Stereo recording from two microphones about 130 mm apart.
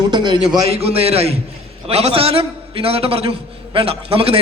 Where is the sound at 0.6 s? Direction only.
50° right (ahead or behind).